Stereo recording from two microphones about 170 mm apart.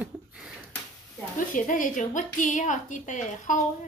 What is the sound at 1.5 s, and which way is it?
A woman's voice, 50° left (ahead or behind).